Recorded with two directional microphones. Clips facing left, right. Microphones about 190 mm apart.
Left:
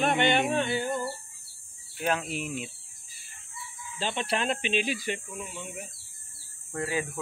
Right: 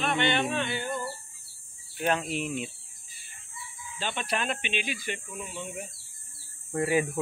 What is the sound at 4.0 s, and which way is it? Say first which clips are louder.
Speech: left 2 dB; 30° left (ahead or behind).